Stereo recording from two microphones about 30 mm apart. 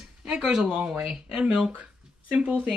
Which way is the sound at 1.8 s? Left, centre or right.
Right.